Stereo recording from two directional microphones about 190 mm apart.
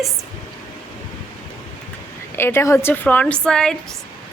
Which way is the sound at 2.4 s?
15° left (ahead or behind).